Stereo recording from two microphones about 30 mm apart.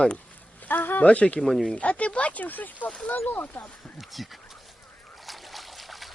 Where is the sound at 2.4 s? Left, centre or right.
Left.